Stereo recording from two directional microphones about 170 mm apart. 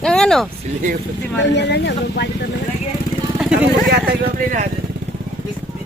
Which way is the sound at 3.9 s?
55° right (ahead or behind).